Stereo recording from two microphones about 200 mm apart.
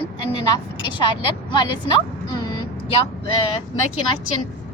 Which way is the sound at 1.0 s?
25° left (ahead or behind).